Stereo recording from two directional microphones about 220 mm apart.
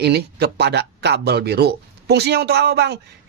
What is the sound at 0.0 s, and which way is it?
Speech, 45° right (ahead or behind).